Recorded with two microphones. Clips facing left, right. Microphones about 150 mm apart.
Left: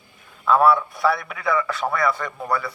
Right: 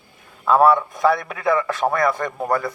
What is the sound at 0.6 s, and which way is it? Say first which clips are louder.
Speech: right 2 dB; centre (ahead or behind).